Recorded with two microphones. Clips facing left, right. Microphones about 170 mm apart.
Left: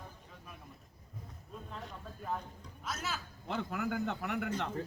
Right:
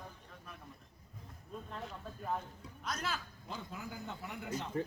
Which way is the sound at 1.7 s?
Centre (ahead or behind).